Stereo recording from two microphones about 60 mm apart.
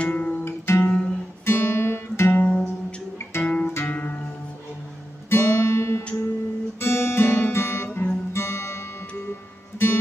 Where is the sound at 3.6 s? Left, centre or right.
Left.